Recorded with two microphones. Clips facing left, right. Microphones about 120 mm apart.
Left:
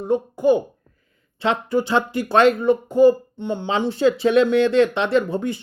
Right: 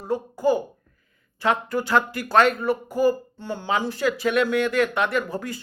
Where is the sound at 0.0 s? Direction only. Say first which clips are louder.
Left 4 dB; 20° left (ahead or behind).